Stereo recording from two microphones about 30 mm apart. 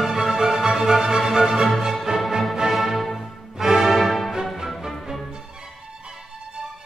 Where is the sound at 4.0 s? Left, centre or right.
Centre.